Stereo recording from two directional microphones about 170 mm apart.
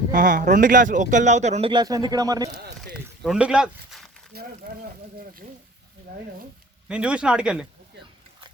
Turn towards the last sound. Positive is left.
turn(degrees=-5)  # may be behind; listen again after turning